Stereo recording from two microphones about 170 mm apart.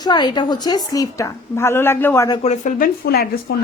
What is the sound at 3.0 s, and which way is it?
Speech, 65° left (ahead or behind).